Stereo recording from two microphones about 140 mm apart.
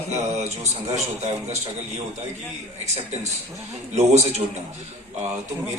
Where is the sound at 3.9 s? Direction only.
55° right (ahead or behind).